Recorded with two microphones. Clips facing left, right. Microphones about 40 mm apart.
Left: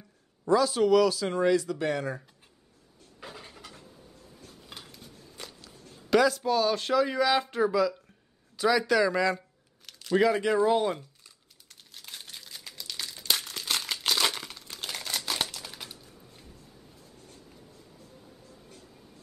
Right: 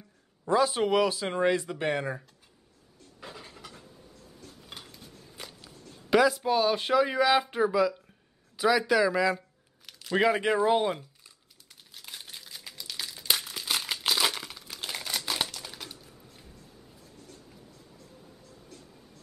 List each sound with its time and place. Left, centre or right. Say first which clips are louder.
0.5 s speech: left 2 dB; right
3.2 s pant: even; centre
4.8 s a sound: even; centre
6.0 s speech: even; centre
9.8 s a sound: left 2 dB; centre
10.1 s speech: left 1 dB; right
10.5 s crumpling: even; centre